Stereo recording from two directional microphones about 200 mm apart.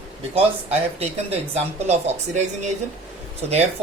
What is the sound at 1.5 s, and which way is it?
Speech, 35° right (ahead or behind).